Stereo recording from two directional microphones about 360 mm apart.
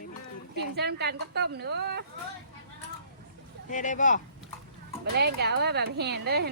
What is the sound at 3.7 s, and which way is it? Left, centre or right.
Speech, left.